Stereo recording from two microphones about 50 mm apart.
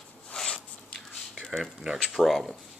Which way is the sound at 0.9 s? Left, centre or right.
Centre.